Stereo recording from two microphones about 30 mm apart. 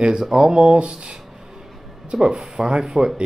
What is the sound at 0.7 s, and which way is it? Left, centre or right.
Speech, right.